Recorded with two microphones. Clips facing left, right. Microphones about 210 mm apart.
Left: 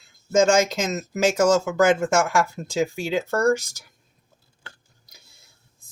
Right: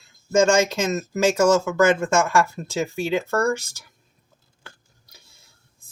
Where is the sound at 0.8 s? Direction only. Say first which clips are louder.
Right 1 dB; 15° left (ahead or behind).